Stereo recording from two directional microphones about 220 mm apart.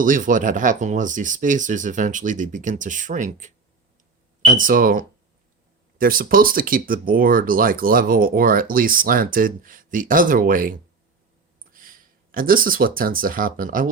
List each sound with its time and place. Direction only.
0.0 s speech: 35° right (ahead or behind)